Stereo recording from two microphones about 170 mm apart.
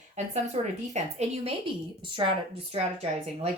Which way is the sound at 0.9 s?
40° right (ahead or behind).